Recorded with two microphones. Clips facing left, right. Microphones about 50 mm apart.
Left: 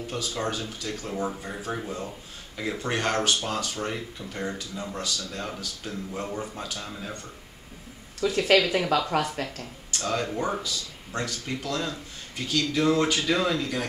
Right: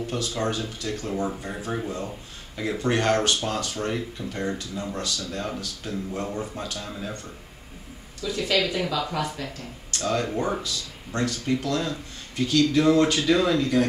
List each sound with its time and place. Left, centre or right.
0.0 s speech: centre
8.2 s speech: left
9.9 s speech: centre